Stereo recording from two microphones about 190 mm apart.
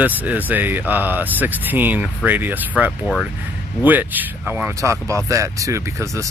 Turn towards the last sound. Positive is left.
turn(degrees=-15)  # may be behind; listen again after turning